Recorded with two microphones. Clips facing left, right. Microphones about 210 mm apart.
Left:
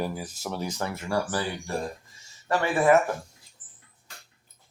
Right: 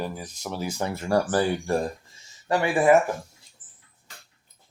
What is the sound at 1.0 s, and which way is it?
Speech, 45° right (ahead or behind).